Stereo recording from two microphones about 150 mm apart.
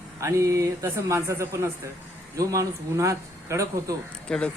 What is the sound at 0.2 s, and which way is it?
Speech, 20° right (ahead or behind).